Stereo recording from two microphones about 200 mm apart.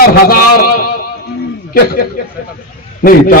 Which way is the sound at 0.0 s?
50° left (ahead or behind).